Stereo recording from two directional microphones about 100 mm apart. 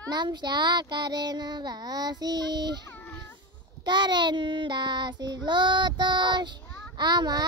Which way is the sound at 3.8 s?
50° right (ahead or behind).